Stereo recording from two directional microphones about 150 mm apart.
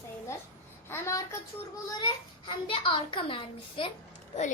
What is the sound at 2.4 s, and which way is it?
A child's voice, 35° left (ahead or behind).